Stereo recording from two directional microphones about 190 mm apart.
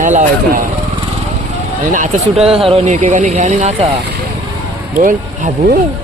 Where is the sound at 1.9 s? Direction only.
35° right (ahead or behind).